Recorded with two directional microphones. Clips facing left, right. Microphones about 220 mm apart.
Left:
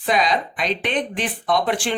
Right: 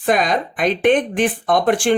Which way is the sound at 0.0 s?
50° right (ahead or behind).